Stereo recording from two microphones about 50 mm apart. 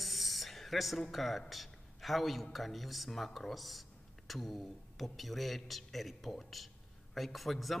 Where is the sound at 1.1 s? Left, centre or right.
Centre.